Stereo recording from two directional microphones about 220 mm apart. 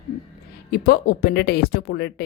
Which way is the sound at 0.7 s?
45° left (ahead or behind).